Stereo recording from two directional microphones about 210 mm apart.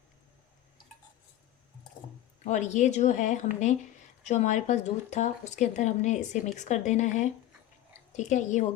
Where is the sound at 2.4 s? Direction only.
35° left (ahead or behind).